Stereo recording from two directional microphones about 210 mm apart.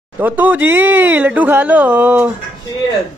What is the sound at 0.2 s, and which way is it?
Speech, 10° right (ahead or behind).